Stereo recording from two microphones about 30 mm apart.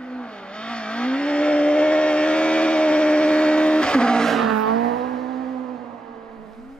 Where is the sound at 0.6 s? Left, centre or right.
Left.